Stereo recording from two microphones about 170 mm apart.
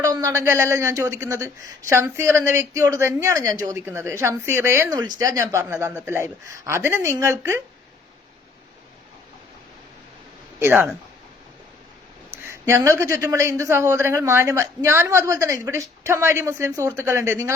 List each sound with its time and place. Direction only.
0.0 s a woman's voice: 20° right (ahead or behind)
10.6 s a woman's voice: 10° right (ahead or behind)
12.3 s a woman's voice: 15° right (ahead or behind)